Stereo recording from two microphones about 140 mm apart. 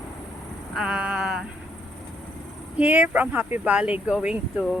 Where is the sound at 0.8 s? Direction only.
5° right (ahead or behind).